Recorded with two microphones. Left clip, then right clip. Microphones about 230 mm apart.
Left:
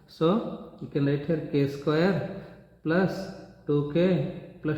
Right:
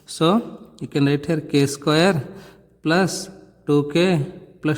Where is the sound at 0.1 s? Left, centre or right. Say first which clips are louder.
Right 6 dB; right.